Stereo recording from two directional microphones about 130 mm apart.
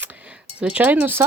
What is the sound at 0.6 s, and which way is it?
Speech, 10° right (ahead or behind).